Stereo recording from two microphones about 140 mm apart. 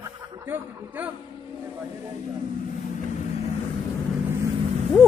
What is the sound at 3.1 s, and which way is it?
Vehicle, 60° left (ahead or behind).